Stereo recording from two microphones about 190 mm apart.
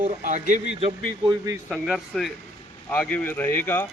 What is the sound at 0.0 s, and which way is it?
Speech, 40° right (ahead or behind).